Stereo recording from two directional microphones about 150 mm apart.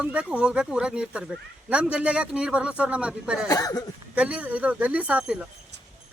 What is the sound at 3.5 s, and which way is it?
Speech, 25° left (ahead or behind).